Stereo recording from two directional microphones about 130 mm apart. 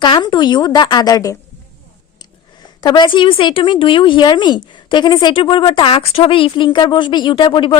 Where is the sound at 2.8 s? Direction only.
35° left (ahead or behind).